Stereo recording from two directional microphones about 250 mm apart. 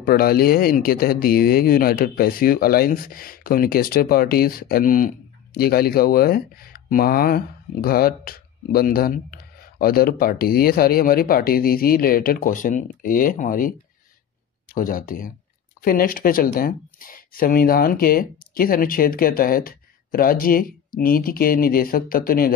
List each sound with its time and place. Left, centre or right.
0.0 s speech: left